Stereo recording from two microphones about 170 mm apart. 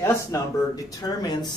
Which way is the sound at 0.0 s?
20° left (ahead or behind).